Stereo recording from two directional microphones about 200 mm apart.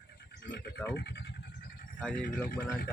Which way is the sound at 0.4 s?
60° left (ahead or behind).